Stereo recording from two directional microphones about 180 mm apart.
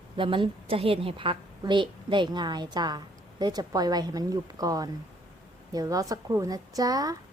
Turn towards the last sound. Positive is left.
turn(degrees=-20)  # may be behind; listen again after turning